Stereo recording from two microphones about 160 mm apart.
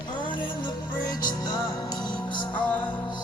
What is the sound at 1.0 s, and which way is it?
Music, 25° left (ahead or behind).